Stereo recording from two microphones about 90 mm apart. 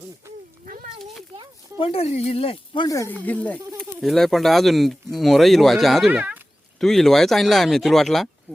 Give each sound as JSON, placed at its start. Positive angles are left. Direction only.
{"t": 1.8, "sound": "speech", "side_deg": 90}
{"t": 3.1, "sound": "speech", "side_deg": 20}
{"t": 3.8, "sound": "speech", "side_deg": 5}
{"t": 6.1, "sound": "speech", "side_deg": -20}
{"t": 6.7, "sound": "speech", "side_deg": 5}
{"t": 8.5, "sound": "speech", "side_deg": 15}